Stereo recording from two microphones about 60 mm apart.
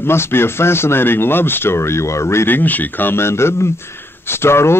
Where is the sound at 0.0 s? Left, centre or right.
Left.